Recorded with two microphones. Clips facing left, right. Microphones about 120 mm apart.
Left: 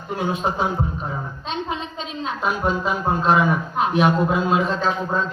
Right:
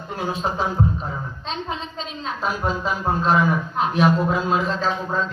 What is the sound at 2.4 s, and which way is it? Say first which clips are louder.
Speech: left 2 dB; centre (ahead or behind).